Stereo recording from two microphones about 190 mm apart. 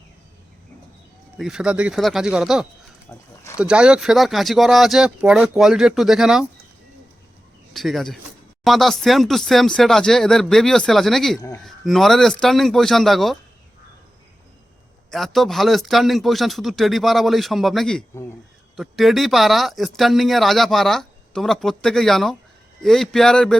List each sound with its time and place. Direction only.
1.4 s speech: 5° right (ahead or behind)
3.1 s speech: 10° left (ahead or behind)
3.6 s speech: 5° right (ahead or behind)
7.7 s speech: centre (ahead or behind)
11.3 s speech: 20° left (ahead or behind)
11.6 s speech: centre (ahead or behind)
15.1 s speech: centre (ahead or behind)